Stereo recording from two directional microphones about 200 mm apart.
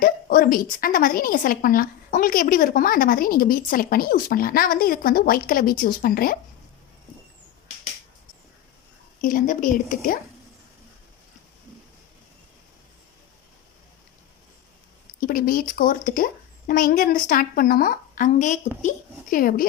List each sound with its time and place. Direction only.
0.0 s a woman's voice: 45° left (ahead or behind)
9.2 s a woman's voice: 40° left (ahead or behind)
15.2 s a woman's voice: 45° left (ahead or behind)